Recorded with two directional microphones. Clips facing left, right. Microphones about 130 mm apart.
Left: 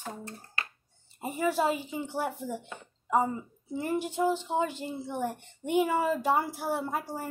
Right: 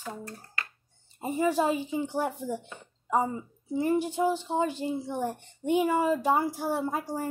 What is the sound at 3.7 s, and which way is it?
A child's voice, 15° right (ahead or behind).